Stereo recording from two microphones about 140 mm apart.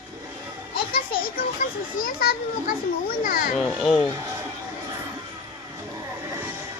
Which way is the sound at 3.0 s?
90° left.